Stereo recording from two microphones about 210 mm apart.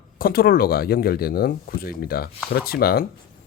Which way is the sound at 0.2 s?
45° left (ahead or behind).